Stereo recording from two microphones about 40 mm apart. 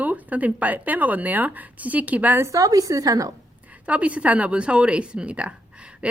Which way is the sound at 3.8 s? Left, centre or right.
Right.